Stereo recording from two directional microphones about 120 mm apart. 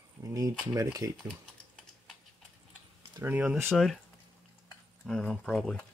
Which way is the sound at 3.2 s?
10° right (ahead or behind).